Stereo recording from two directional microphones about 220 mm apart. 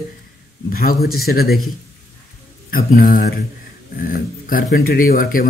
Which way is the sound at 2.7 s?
40° left (ahead or behind).